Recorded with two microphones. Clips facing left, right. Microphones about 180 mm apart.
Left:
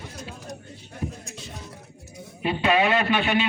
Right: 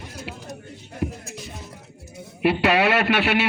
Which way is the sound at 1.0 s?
80° right.